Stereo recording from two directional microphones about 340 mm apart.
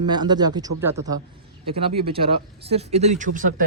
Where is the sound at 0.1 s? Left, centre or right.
Centre.